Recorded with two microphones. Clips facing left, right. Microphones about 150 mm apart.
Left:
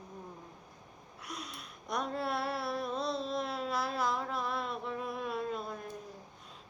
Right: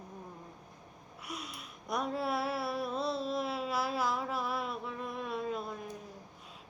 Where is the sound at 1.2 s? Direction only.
5° right (ahead or behind).